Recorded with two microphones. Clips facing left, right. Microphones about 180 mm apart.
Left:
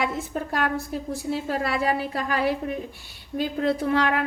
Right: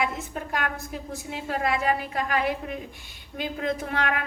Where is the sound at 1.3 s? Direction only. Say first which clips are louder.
Left 1 dB; 35° left (ahead or behind).